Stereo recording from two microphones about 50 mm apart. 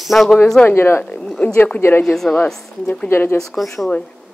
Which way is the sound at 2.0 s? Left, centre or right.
Centre.